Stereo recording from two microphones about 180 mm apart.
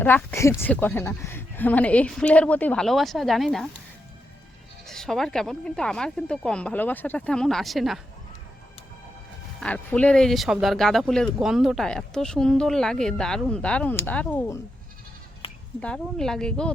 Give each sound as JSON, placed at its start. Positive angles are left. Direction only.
{"t": 0.0, "sound": "a woman's voice", "side_deg": 10}
{"t": 4.9, "sound": "speech", "side_deg": 0}
{"t": 9.6, "sound": "speech", "side_deg": 5}
{"t": 15.4, "sound": "bleat", "side_deg": 30}
{"t": 15.8, "sound": "speech", "side_deg": 5}